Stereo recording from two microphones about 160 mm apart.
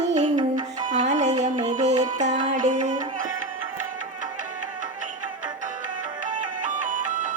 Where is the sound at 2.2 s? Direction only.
50° right (ahead or behind).